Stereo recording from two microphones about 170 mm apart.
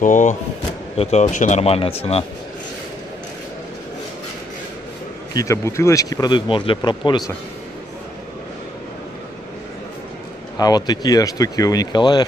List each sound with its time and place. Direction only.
0.0 s speech: 45° left (ahead or behind)
5.3 s speech: 20° left (ahead or behind)
10.6 s speech: 25° left (ahead or behind)